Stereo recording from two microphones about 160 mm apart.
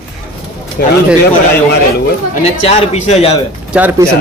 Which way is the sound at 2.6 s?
40° left (ahead or behind).